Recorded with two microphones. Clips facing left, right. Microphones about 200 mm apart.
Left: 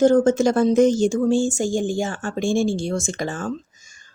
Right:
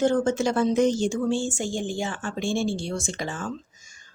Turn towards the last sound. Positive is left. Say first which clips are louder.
# left 5 dB
turn(degrees=45)  # may be behind; listen again after turning